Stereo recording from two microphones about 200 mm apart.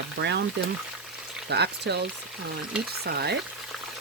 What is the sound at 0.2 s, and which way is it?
Speech, 55° right (ahead or behind).